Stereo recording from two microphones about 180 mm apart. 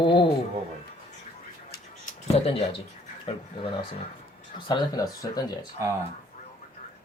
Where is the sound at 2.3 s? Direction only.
30° left (ahead or behind).